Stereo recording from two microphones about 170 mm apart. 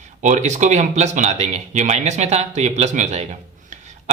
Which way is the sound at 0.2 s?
45° right (ahead or behind).